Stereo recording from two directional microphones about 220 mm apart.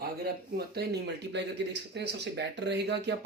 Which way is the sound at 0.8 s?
50° right (ahead or behind).